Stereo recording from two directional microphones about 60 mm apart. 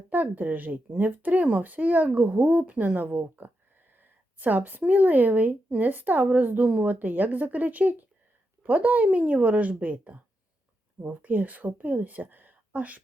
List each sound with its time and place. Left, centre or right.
0.1 s a woman's voice: right